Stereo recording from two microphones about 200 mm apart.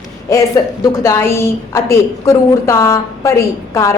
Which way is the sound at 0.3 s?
15° left (ahead or behind).